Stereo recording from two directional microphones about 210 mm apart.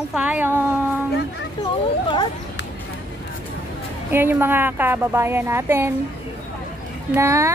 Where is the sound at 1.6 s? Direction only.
25° left (ahead or behind).